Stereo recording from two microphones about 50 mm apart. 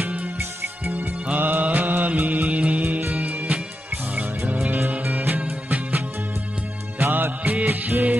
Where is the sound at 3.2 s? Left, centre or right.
Right.